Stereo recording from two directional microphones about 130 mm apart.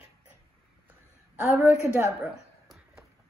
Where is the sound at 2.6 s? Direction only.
Centre (ahead or behind).